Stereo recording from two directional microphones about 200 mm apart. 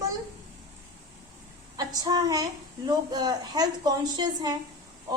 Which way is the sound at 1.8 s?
20° right (ahead or behind).